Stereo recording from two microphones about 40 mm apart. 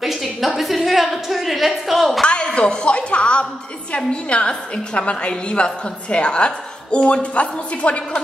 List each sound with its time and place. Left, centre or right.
0.0 s a woman's voice: centre
2.2 s music: left
3.9 s a woman's voice: left